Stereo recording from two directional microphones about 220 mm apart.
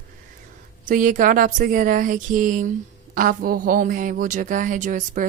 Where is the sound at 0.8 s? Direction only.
35° right (ahead or behind).